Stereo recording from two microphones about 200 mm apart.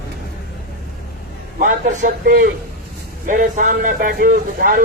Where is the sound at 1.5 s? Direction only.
45° right (ahead or behind).